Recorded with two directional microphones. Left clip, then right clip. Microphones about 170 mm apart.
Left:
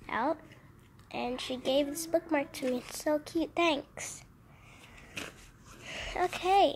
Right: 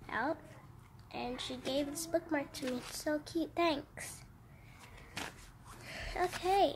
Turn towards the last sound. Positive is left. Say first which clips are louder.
# left 5 dB
turn(degrees=20)  # may be behind; listen again after turning